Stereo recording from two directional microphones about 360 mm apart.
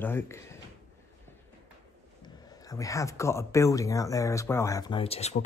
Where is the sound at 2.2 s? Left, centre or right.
Centre.